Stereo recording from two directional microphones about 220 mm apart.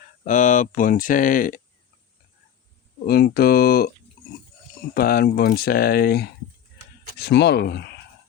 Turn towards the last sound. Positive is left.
turn(degrees=50)  # may be behind; listen again after turning